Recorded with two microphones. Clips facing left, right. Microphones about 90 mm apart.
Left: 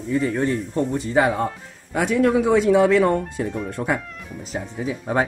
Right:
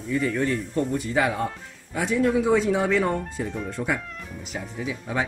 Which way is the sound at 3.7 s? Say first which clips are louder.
Left 3 dB; 45° left (ahead or behind).